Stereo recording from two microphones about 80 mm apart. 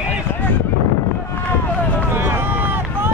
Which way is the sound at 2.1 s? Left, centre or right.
Right.